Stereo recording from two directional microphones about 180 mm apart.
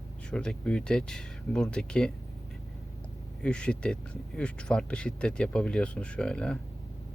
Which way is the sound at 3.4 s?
5° left (ahead or behind).